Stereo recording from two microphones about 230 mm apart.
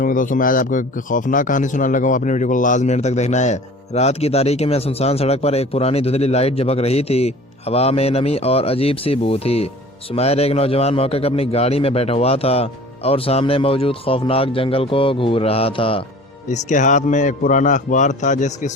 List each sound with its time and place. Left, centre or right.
0.0 s a man's voice: left